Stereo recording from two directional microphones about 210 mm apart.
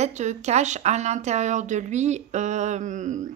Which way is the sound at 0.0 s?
35° right (ahead or behind).